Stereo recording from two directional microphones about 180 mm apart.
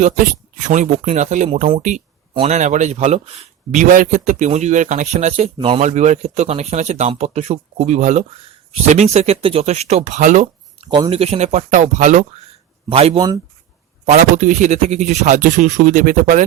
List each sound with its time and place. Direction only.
0.0 s a man's voice: 45° right (ahead or behind)
5.8 s a man's voice: 40° right (ahead or behind)
10.8 s a man's voice: 30° right (ahead or behind); by 12.2 s 45° right (ahead or behind)
12.9 s speech: 30° right (ahead or behind)
14.0 s speech: 40° right (ahead or behind)